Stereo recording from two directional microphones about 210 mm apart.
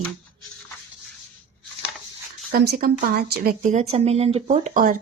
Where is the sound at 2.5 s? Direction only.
45° right (ahead or behind).